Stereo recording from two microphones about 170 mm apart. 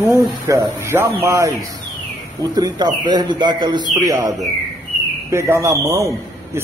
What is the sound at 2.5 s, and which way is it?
A man's voice, 25° right (ahead or behind).